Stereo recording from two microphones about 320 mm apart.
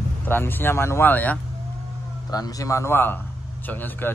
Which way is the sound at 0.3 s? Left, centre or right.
Centre.